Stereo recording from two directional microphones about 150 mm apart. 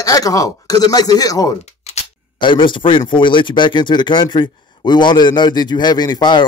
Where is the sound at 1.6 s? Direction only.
45° left (ahead or behind).